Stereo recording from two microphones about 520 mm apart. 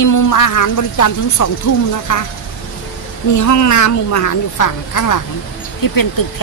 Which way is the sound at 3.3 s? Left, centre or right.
Left.